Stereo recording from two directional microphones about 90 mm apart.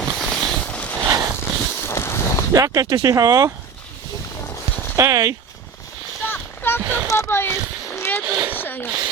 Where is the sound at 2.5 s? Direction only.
40° right (ahead or behind).